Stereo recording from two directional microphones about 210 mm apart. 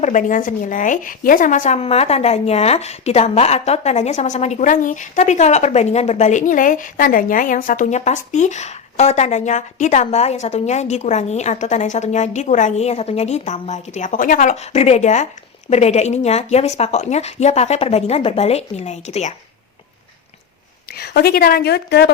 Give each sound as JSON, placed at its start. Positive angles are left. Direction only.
{"t": 0.0, "sound": "speech", "side_deg": 35}
{"t": 21.0, "sound": "a woman's voice", "side_deg": 50}